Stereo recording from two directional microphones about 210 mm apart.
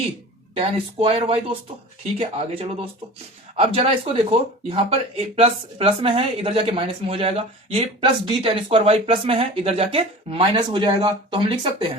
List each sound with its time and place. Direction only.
0.5 s speech: 25° right (ahead or behind)